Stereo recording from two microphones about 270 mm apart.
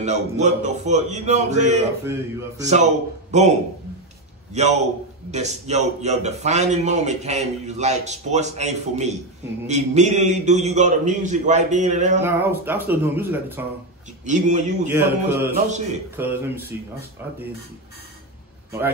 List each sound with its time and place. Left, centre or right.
0.0 s a man's voice: right
4.6 s a man's voice: right
12.2 s speech: centre
14.2 s a man's voice: right
14.9 s speech: centre